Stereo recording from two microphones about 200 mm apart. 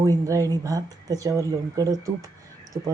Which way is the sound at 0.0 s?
15° right (ahead or behind).